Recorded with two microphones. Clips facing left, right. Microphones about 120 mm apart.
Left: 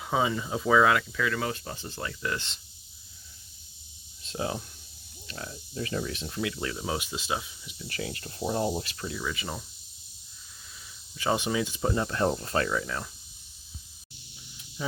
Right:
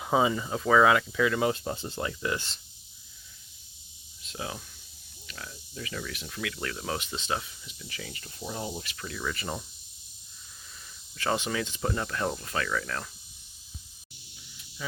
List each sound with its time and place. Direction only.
0.0 s speech: 5° right (ahead or behind)
1.2 s speech: 15° right (ahead or behind)
2.0 s speech: 15° right (ahead or behind)
4.2 s speech: 35° left (ahead or behind)
6.6 s speech: 15° left (ahead or behind)
7.9 s speech: 55° left (ahead or behind)
9.1 s speech: 5° left (ahead or behind)
11.2 s speech: 15° left (ahead or behind)
12.8 s speech: 10° left (ahead or behind)
14.8 s speech: 30° left (ahead or behind)